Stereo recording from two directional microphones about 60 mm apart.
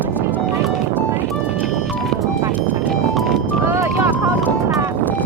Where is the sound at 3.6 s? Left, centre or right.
Right.